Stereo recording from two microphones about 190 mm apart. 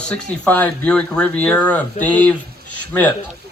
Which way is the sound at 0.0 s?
5° left (ahead or behind).